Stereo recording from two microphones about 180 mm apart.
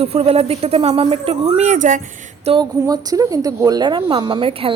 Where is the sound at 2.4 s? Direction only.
30° right (ahead or behind).